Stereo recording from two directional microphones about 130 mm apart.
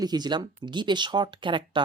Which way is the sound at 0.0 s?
30° right (ahead or behind).